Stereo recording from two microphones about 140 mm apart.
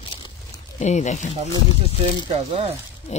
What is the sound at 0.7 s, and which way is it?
Speech, 55° left (ahead or behind).